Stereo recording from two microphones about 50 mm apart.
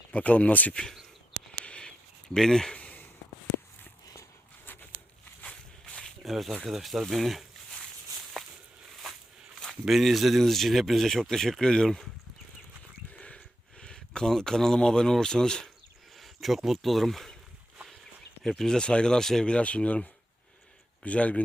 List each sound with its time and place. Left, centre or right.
0.1 s speech: left
1.6 s a sound: left
2.3 s speech: centre
2.7 s a sound: left
4.6 s a sound: left
5.4 s walk: left
6.2 s speech: centre
8.4 s walk: centre
9.8 s speech: centre
13.2 s a sound: centre
16.1 s speech: centre
18.4 s speech: centre
19.5 s speech: left